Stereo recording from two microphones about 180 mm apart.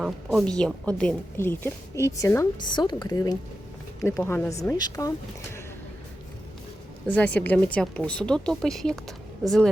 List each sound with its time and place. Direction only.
0.0 s a woman's voice: centre (ahead or behind); by 5.1 s 20° left (ahead or behind)
7.1 s a woman's voice: 5° left (ahead or behind)